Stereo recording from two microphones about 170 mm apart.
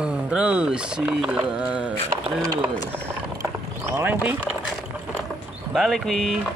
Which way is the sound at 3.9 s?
10° right (ahead or behind).